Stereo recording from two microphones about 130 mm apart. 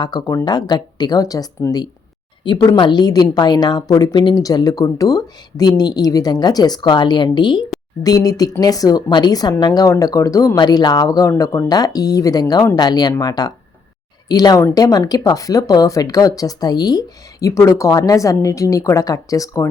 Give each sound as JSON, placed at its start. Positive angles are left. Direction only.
{"t": 0.0, "sound": "a woman's voice", "side_deg": 30}